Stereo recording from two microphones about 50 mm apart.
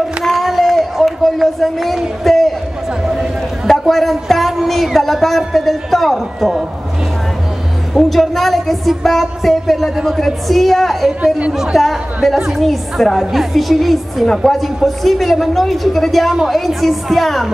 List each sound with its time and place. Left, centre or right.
0.2 s a sound: centre
3.6 s a woman's voice: centre
7.9 s a woman's voice: centre